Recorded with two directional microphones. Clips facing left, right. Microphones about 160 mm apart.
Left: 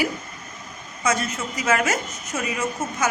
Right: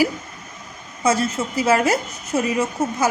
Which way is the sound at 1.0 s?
30° right (ahead or behind).